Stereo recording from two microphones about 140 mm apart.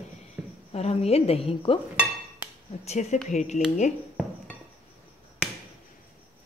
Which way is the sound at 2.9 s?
50° left (ahead or behind).